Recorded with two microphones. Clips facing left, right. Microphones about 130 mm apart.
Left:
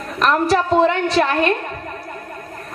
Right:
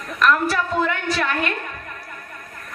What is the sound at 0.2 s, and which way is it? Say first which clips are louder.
A man's voice: left 3 dB; 30° left (ahead or behind).